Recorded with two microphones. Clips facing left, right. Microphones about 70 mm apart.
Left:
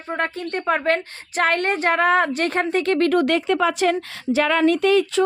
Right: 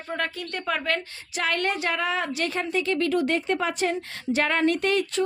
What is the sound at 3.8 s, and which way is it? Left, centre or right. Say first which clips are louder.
Speech: left 6 dB; left.